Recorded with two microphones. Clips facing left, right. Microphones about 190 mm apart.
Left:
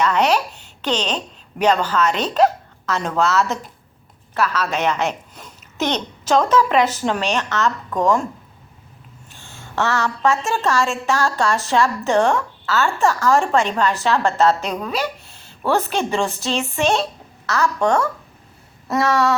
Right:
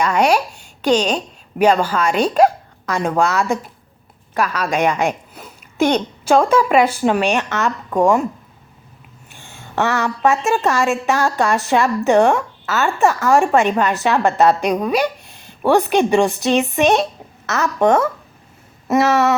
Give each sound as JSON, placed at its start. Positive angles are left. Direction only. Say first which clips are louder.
{"t": 0.0, "sound": "a woman's voice", "louder": "right 2 dB", "side_deg": -10}
{"t": 9.3, "sound": "a woman's voice", "louder": "right 3 dB", "side_deg": -15}
{"t": 18.9, "sound": "a sound", "louder": "right 3 dB", "side_deg": -20}